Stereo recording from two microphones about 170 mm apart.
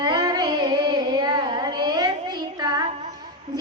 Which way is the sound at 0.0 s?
25° right (ahead or behind).